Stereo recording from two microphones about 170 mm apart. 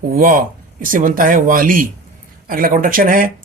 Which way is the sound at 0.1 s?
55° right (ahead or behind).